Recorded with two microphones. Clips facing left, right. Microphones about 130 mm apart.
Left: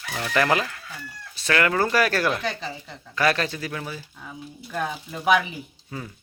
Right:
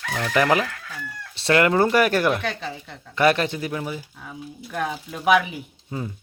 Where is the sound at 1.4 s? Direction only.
25° right (ahead or behind).